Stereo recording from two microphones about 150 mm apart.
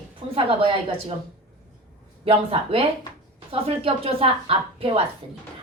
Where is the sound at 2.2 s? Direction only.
40° right (ahead or behind).